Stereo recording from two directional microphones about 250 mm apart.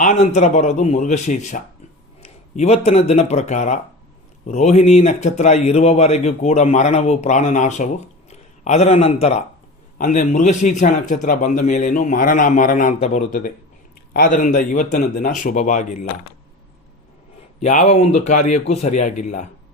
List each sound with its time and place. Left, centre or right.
0.0 s a man's voice: left
17.6 s speech: left